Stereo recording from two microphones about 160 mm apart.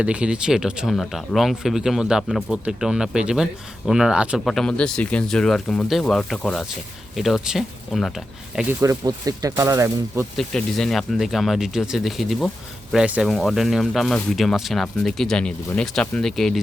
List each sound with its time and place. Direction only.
0.0 s speech: 5° right (ahead or behind)
8.8 s speech: 20° right (ahead or behind)
10.3 s speech: centre (ahead or behind)